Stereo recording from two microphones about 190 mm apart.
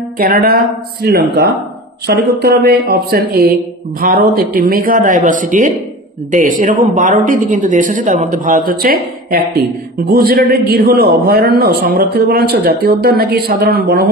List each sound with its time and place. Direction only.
0.2 s speech: 50° right (ahead or behind)